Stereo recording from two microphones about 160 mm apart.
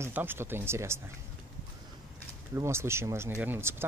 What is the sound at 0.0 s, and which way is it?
Speech, 15° right (ahead or behind).